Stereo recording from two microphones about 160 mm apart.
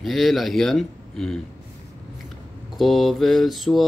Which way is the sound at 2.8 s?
Centre (ahead or behind).